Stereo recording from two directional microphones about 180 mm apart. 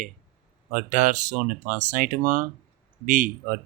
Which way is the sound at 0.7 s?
45° right (ahead or behind).